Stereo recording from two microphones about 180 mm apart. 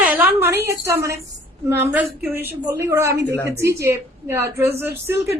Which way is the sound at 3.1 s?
75° right (ahead or behind).